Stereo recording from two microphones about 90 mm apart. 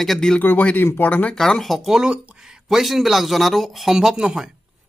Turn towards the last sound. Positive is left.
turn(degrees=-10)  # may be behind; listen again after turning